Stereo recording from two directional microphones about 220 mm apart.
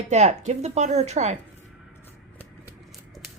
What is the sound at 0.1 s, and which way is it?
Speech, 30° right (ahead or behind).